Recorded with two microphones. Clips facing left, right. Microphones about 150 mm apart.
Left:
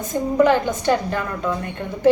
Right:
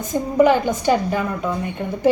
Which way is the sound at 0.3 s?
10° right (ahead or behind).